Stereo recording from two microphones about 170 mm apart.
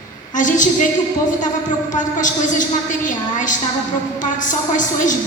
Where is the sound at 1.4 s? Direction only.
50° left (ahead or behind).